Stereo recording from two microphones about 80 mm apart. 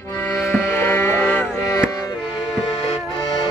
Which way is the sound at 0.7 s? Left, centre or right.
Left.